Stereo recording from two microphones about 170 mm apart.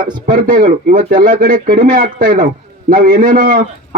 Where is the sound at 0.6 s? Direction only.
50° right (ahead or behind).